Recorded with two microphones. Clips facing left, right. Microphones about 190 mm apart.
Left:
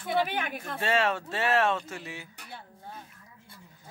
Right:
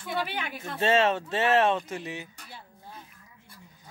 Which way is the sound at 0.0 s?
50° left (ahead or behind).